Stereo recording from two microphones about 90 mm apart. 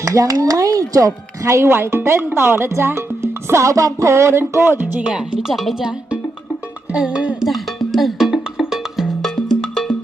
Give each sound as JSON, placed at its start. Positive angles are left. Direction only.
{"t": 0.0, "sound": "a woman's voice", "side_deg": -40}
{"t": 5.0, "sound": "speech", "side_deg": -10}
{"t": 6.9, "sound": "speech", "side_deg": -10}
{"t": 7.4, "sound": "music", "side_deg": 0}